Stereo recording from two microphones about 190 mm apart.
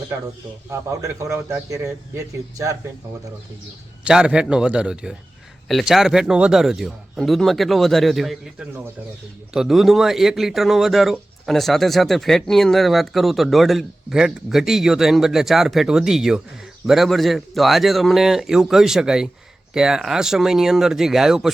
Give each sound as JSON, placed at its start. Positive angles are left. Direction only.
{"t": 0.7, "sound": "a man's voice", "side_deg": -15}
{"t": 4.0, "sound": "speech", "side_deg": -5}